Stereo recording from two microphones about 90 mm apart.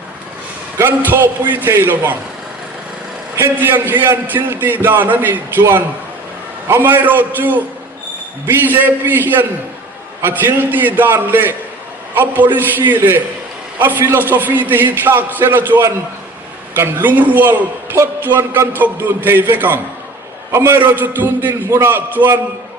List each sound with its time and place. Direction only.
0.8 s a man's voice: 20° right (ahead or behind)
3.3 s a man's voice: 25° right (ahead or behind)